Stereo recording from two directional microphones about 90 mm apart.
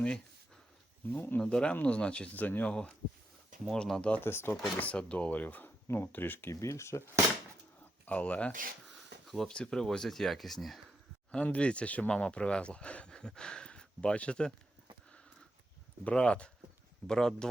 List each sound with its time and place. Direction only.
1.1 s speech: 20° left (ahead or behind)
1.4 s speech: 10° left (ahead or behind)
4.2 s speech: 25° left (ahead or behind)
4.8 s speech: 15° left (ahead or behind); by 7.0 s 30° left (ahead or behind)
8.0 s speech: 15° left (ahead or behind)
9.2 s speech: centre (ahead or behind)
11.3 s speech: 15° left (ahead or behind)
16.0 s speech: 10° left (ahead or behind)